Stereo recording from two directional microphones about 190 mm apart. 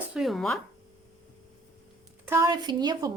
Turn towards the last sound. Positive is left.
turn(degrees=-20)  # may be behind; listen again after turning